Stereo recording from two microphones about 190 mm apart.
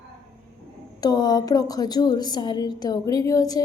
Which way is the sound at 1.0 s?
20° left (ahead or behind).